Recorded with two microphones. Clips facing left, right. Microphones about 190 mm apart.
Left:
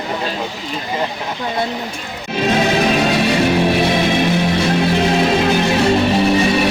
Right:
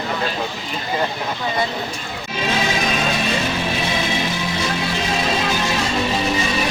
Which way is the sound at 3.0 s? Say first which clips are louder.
Left 7 dB; 65° left (ahead or behind).